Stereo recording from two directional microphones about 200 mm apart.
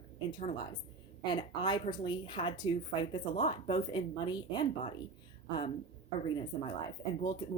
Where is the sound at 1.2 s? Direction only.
20° left (ahead or behind).